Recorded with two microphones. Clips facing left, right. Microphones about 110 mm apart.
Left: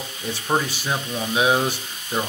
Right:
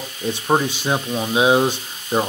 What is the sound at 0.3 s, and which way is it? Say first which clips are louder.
Speech: right 4 dB; 20° right (ahead or behind).